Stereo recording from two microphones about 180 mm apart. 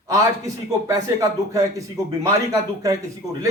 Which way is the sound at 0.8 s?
20° right (ahead or behind).